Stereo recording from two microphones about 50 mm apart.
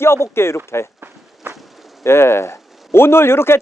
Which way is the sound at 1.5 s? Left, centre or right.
Centre.